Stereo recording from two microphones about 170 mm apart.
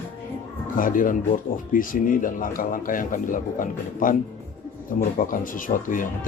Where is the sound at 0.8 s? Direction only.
55° left (ahead or behind).